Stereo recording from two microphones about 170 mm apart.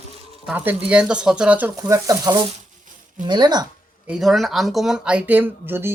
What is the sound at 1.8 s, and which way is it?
Speech, 20° right (ahead or behind).